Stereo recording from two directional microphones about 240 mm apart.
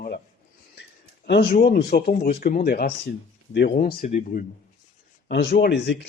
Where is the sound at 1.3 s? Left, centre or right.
Left.